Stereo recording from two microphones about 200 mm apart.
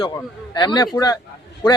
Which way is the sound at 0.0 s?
20° left (ahead or behind).